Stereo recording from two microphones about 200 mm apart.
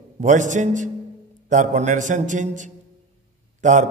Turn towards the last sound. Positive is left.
turn(degrees=-40)  # may be behind; listen again after turning